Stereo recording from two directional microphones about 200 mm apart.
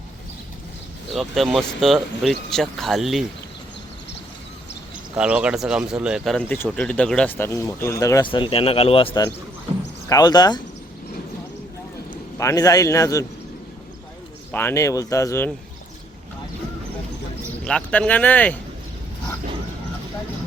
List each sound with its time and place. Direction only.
1.1 s speech: centre (ahead or behind)
5.1 s speech: 5° right (ahead or behind); by 10.6 s 20° left (ahead or behind)
12.4 s speech: 15° left (ahead or behind)
14.5 s speech: 10° left (ahead or behind)
17.7 s speech: 5° left (ahead or behind)